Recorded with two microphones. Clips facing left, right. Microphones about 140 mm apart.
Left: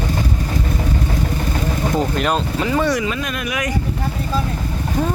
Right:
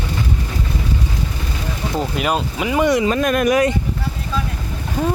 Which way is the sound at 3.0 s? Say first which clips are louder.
Right 7 dB; 45° right (ahead or behind).